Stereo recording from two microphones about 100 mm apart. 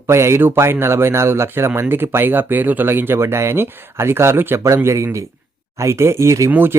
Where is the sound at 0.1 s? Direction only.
25° right (ahead or behind).